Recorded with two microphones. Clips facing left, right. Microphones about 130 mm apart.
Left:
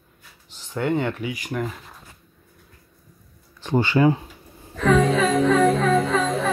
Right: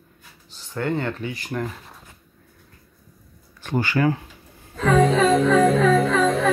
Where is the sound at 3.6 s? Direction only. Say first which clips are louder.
Left 3 dB; 20° left (ahead or behind).